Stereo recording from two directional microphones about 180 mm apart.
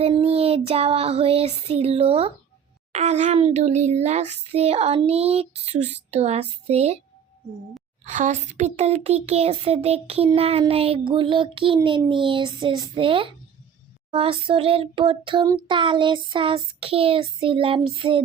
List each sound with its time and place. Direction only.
0.0 s child singing: 35° right (ahead or behind)
2.9 s a child's voice: 40° right (ahead or behind)
8.0 s a child's voice: 45° right (ahead or behind); by 13.3 s 30° right (ahead or behind)
14.1 s child singing: 30° right (ahead or behind)